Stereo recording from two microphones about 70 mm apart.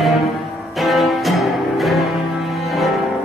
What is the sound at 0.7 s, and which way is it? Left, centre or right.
Music, centre.